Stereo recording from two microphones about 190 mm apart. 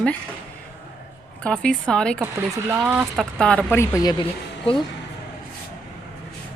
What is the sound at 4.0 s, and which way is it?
Speech, 20° left (ahead or behind).